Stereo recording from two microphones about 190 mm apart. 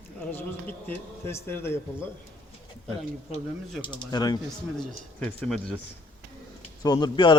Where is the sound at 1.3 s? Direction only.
10° left (ahead or behind).